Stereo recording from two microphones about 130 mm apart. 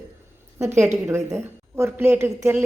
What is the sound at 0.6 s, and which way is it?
A woman's voice, 20° right (ahead or behind).